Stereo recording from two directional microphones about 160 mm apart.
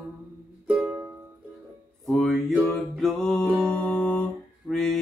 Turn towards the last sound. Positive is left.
turn(degrees=0)  # may be behind; listen again after turning